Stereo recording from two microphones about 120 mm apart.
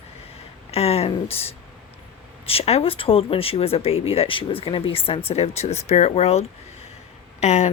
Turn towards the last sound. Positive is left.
turn(degrees=70)  # may be behind; listen again after turning